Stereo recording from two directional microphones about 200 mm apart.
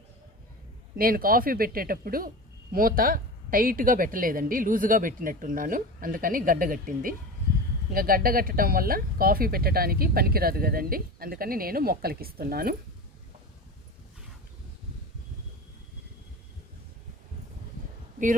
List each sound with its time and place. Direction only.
0.9 s speech: 45° right (ahead or behind)